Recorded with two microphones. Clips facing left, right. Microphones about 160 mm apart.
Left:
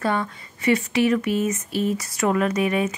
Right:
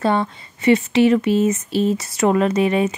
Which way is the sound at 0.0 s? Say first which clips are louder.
Right 5 dB; 25° right (ahead or behind).